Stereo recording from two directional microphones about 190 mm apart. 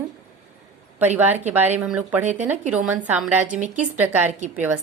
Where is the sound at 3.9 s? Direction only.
10° right (ahead or behind).